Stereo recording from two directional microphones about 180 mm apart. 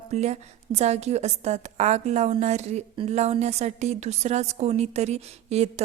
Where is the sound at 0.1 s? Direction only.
40° right (ahead or behind).